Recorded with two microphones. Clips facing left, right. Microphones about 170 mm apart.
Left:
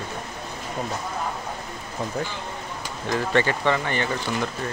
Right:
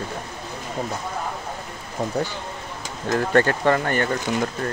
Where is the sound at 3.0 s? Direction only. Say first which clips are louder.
Right 3 dB; 55° right (ahead or behind).